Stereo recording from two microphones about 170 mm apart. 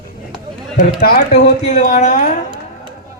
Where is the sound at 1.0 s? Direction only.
65° left (ahead or behind).